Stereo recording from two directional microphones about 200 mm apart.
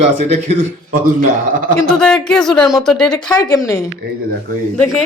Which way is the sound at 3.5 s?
15° left (ahead or behind).